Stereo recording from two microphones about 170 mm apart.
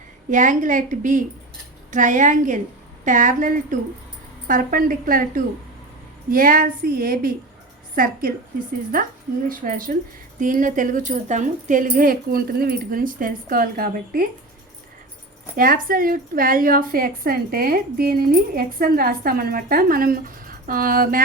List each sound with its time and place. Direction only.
0.3 s a woman's voice: 50° right (ahead or behind)
15.5 s a woman's voice: 55° right (ahead or behind)